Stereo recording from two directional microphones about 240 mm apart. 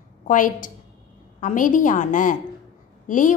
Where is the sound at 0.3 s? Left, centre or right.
Left.